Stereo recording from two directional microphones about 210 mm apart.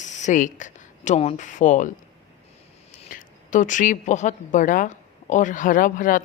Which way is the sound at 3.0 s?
40° left (ahead or behind).